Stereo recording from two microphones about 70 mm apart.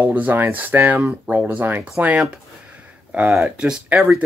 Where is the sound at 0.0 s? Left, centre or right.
Right.